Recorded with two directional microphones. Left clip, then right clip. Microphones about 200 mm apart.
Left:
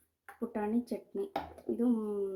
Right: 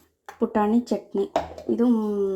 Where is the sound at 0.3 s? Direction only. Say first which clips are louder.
Right 13 dB; 30° right (ahead or behind).